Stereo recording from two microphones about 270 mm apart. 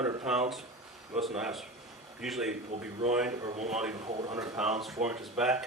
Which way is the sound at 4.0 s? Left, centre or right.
Right.